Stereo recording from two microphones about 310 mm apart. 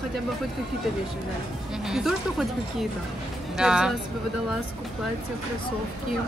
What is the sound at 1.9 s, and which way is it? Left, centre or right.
Speech, centre.